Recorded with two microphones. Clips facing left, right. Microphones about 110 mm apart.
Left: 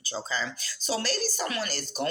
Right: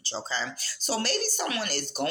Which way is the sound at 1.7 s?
40° left (ahead or behind).